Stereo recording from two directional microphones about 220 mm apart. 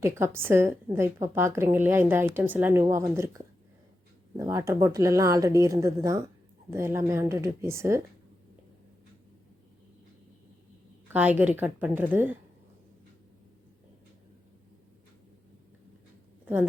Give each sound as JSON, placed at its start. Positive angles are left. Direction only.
{"t": 0.0, "sound": "a woman's voice", "side_deg": -10}
{"t": 11.1, "sound": "a woman's voice", "side_deg": -5}